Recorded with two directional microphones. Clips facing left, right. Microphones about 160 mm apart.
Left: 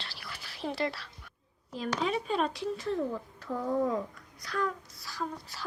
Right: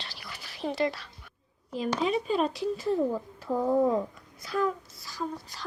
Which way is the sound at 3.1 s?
20° right (ahead or behind).